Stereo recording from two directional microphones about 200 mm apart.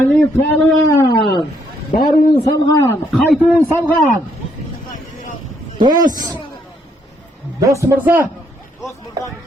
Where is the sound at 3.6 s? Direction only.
10° left (ahead or behind).